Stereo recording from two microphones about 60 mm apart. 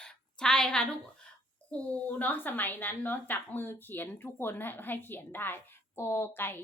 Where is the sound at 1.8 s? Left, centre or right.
Left.